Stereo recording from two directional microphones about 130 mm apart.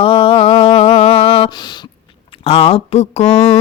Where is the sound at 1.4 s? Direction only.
35° left (ahead or behind).